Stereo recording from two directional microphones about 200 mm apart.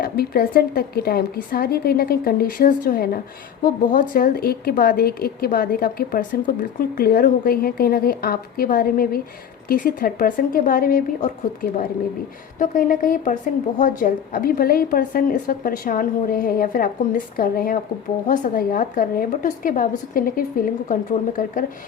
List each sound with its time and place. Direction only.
0.0 s a woman's voice: 50° left (ahead or behind)